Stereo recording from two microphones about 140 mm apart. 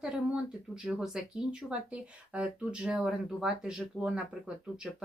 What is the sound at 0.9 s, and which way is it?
Speech, 5° right (ahead or behind).